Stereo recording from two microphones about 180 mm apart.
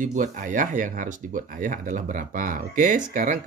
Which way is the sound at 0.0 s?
45° right (ahead or behind).